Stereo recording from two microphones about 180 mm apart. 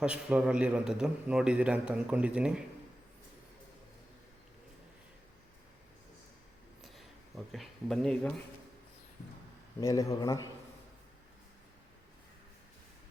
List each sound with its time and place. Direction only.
0.0 s a man's voice: 5° right (ahead or behind)
6.8 s a sound: centre (ahead or behind)
9.8 s a man's voice: 20° left (ahead or behind)